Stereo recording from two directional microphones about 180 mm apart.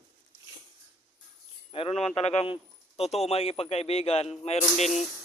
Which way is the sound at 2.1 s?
35° left (ahead or behind).